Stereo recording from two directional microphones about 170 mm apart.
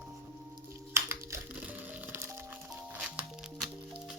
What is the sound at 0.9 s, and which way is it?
Music, 15° right (ahead or behind).